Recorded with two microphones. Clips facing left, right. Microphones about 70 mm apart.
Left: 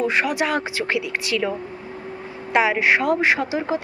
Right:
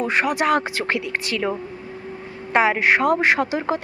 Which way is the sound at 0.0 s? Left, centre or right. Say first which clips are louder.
Right 1 dB; right.